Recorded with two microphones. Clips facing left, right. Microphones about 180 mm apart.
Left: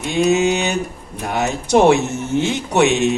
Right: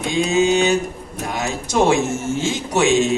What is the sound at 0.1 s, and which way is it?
Speech, 65° left (ahead or behind).